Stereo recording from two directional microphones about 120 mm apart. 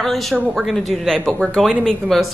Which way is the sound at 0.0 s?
Centre (ahead or behind).